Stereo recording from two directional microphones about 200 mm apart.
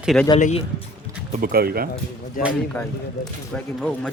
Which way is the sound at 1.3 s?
45° right (ahead or behind).